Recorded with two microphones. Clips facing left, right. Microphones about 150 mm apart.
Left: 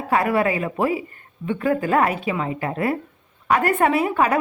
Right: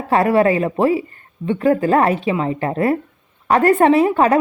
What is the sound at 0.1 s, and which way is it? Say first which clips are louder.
A woman's voice: right 6 dB; 35° right (ahead or behind).